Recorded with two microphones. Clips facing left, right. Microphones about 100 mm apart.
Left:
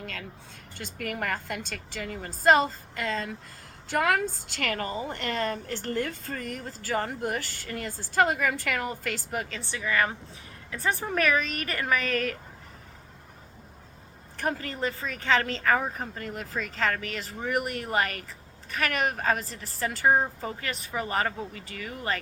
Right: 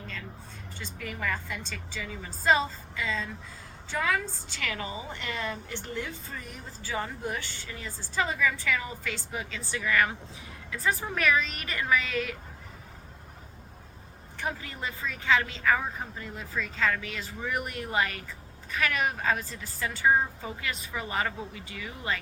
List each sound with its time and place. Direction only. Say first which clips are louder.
0.0 s a sound: left 3 dB; 70° left (ahead or behind)
0.7 s a woman's voice: left 5 dB; 65° left (ahead or behind)
6.8 s a woman's voice: left 4 dB; 50° left (ahead or behind)
9.7 s speech: even; 30° left (ahead or behind)
11.2 s a woman's voice: left 2 dB; 45° left (ahead or behind)
14.4 s a woman's voice: left 5 dB; 55° left (ahead or behind)
16.7 s a woman's voice: left 1 dB; 50° left (ahead or behind)